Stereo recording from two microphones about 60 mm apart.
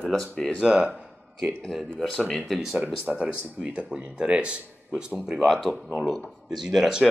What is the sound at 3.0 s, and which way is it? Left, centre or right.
Speech, centre.